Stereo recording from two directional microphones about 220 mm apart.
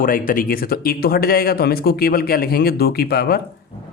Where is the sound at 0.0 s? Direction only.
40° left (ahead or behind).